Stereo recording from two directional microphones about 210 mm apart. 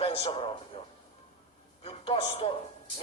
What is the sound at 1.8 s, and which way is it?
Speech, 25° left (ahead or behind).